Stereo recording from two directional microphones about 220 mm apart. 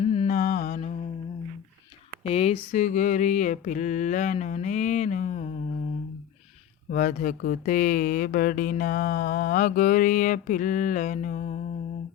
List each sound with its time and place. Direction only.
0.0 s music: 30° left (ahead or behind)
2.2 s speech: 25° left (ahead or behind)
6.9 s speech: 35° left (ahead or behind)